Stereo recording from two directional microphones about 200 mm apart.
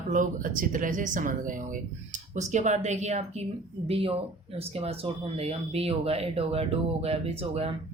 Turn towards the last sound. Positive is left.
turn(degrees=-30)  # may be behind; listen again after turning